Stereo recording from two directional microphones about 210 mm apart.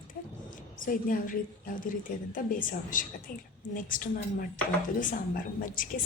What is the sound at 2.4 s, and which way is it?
Speech, 40° left (ahead or behind).